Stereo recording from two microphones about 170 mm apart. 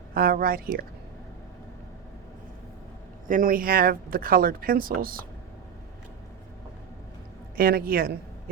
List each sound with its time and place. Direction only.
0.1 s speech: 60° right (ahead or behind)
3.2 s speech: 55° right (ahead or behind)
7.5 s speech: 60° right (ahead or behind)